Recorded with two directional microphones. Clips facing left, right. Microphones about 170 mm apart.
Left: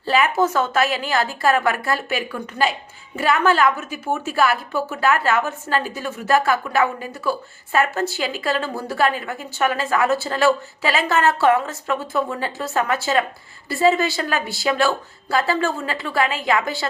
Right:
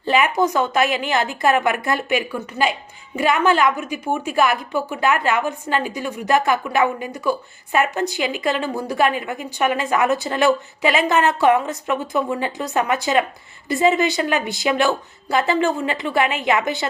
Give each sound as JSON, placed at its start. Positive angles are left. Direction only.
{"t": 0.1, "sound": "a woman's voice", "side_deg": -15}